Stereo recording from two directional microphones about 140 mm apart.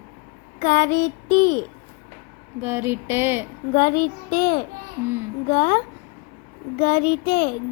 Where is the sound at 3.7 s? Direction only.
80° left.